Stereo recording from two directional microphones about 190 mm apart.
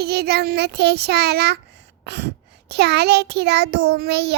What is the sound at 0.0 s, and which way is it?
Child singing, 60° right (ahead or behind).